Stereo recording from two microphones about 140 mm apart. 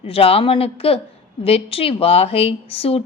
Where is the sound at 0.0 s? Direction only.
45° left (ahead or behind).